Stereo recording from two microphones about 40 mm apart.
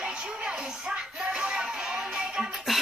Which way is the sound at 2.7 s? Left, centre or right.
Centre.